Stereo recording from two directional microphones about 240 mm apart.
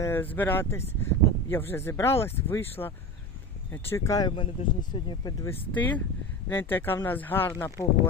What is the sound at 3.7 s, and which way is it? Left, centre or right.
Speech, centre.